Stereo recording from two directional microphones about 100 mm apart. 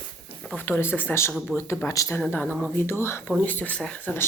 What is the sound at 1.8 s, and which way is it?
Speech, 35° left (ahead or behind).